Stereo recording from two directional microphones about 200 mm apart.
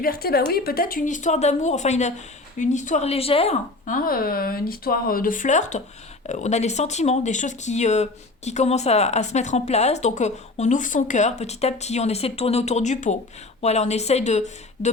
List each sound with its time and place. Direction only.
0.0 s a woman's voice: 50° left (ahead or behind)